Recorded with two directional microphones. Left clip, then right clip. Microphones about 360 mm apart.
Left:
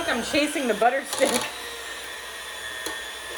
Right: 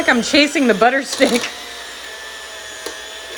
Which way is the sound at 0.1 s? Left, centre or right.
Right.